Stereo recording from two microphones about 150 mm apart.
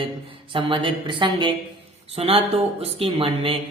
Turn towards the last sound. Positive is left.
turn(degrees=-35)  # may be behind; listen again after turning